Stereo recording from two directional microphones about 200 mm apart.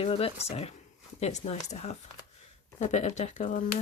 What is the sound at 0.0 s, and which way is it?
Speech, 30° left (ahead or behind).